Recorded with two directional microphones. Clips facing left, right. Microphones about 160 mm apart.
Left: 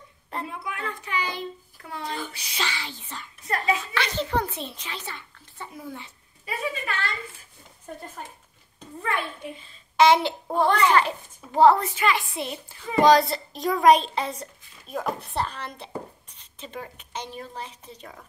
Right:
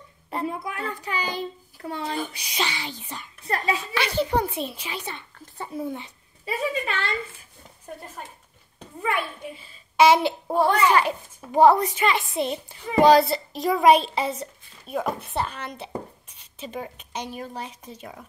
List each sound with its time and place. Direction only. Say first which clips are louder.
0.5 s a child's voice: right 3 dB; 35° right (ahead or behind)
2.1 s a child's voice: right 4 dB; 15° right (ahead or behind)
5.8 s a child's voice: right 10 dB; 20° right (ahead or behind)
9.0 s a child's voice: right 2 dB; 5° right (ahead or behind)